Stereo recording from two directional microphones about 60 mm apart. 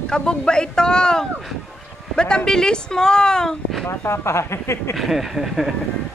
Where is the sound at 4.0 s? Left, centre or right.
Left.